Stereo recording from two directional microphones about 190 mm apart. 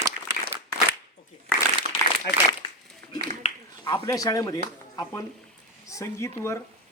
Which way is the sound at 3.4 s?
35° left (ahead or behind).